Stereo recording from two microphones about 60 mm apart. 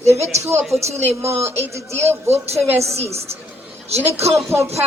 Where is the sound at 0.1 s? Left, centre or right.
Right.